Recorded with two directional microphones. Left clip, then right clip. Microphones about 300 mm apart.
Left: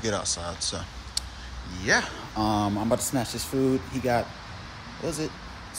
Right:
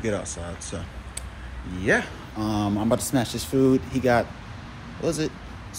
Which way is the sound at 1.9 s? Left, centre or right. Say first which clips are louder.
Left 1 dB; centre.